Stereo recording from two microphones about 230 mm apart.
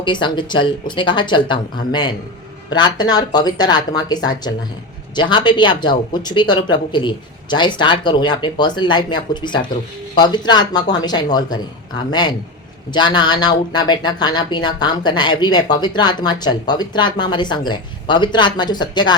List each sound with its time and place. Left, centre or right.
0.0 s speech: centre